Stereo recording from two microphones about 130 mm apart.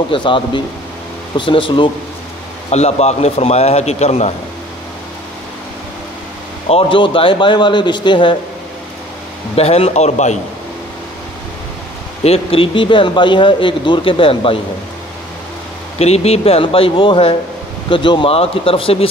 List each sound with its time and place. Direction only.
0.1 s speech: 40° left (ahead or behind)
2.7 s a man's voice: 55° left (ahead or behind)
6.7 s speech: 45° left (ahead or behind)
9.6 s a man's voice: 50° left (ahead or behind)
12.2 s speech: 50° left (ahead or behind)
16.0 s speech: 55° left (ahead or behind)